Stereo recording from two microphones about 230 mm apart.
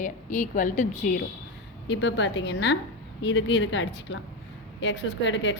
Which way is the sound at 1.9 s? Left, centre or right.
Left.